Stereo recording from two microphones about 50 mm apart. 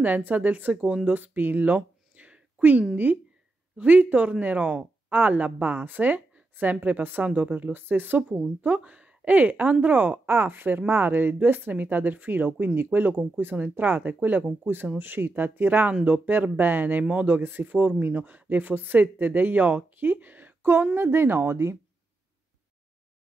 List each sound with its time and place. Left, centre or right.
0.0 s speech: right
3.7 s speech: right
7.2 s speech: right
7.5 s speech: right
8.6 s speech: right
10.2 s speech: right
15.0 s speech: right
17.4 s speech: right
20.8 s speech: right